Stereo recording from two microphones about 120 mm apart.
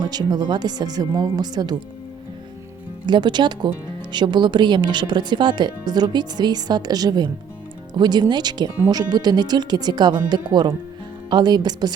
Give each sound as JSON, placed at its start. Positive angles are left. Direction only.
{"t": 0.0, "sound": "speech", "side_deg": -35}
{"t": 3.1, "sound": "speech", "side_deg": -40}